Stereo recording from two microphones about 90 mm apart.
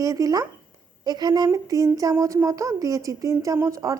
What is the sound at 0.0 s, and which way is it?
A woman's voice, 40° right (ahead or behind).